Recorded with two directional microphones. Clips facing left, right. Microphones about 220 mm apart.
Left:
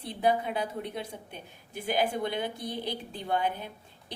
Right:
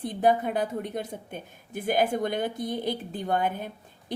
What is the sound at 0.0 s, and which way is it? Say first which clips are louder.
A woman's voice: right 4 dB; 50° right (ahead or behind).